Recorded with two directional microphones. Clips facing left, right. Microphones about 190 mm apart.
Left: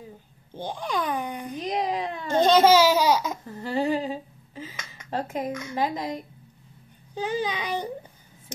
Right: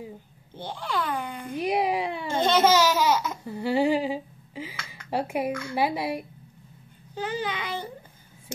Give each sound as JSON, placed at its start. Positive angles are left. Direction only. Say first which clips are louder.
{"t": 0.6, "sound": "a child's voice", "louder": "left 2 dB", "side_deg": 15}
{"t": 1.5, "sound": "a sound", "louder": "right 4 dB", "side_deg": -10}
{"t": 2.3, "sound": "laughter", "louder": "left 4 dB", "side_deg": 15}
{"t": 3.4, "sound": "humming", "louder": "right 5 dB", "side_deg": -10}
{"t": 5.1, "sound": "a child's voice", "louder": "right 2 dB", "side_deg": -10}
{"t": 5.5, "sound": "a child's voice", "louder": "right 2 dB", "side_deg": 20}
{"t": 5.8, "sound": "a child's voice", "louder": "right 1 dB", "side_deg": -10}
{"t": 7.2, "sound": "a child's voice", "louder": "left 2 dB", "side_deg": 15}